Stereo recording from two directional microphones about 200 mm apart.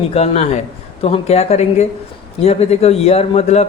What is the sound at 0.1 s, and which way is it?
Speech, 30° left (ahead or behind).